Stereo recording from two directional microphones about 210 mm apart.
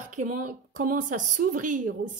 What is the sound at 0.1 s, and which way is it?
A woman's voice, 40° right (ahead or behind).